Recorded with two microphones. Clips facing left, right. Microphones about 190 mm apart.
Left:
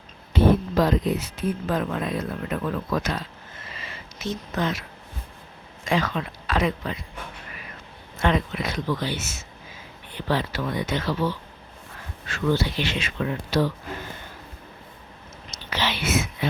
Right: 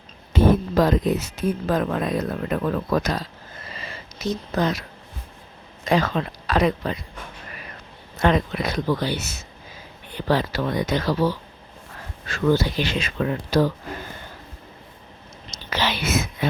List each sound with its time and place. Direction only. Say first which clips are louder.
0.3 s speech: right 2 dB; 45° right (ahead or behind)
8.2 s speech: right 3 dB; 40° right (ahead or behind)
15.7 s whispering: right 2 dB; 40° right (ahead or behind)